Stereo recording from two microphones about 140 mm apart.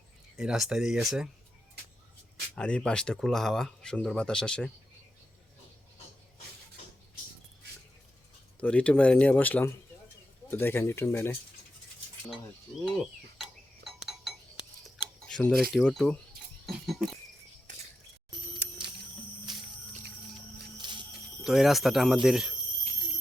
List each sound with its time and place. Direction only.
0.3 s speech: 5° right (ahead or behind)
2.6 s speech: 5° left (ahead or behind)
8.6 s speech: 5° left (ahead or behind)
12.8 s cutlery: centre (ahead or behind)
15.3 s speech: 5° left (ahead or behind)
16.6 s a sound: centre (ahead or behind)
18.6 s music: 10° right (ahead or behind)
20.7 s music: 35° right (ahead or behind)
21.4 s speech: centre (ahead or behind)